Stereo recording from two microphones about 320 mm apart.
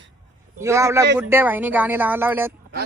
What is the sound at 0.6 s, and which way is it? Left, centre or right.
Speech, centre.